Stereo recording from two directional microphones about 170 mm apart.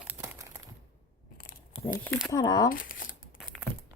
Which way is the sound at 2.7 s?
55° left (ahead or behind).